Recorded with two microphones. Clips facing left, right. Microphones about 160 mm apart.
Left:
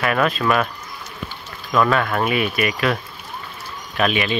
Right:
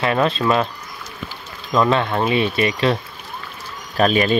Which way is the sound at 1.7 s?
25° right (ahead or behind).